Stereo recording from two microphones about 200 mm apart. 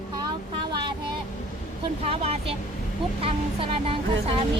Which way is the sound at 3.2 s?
30° right (ahead or behind).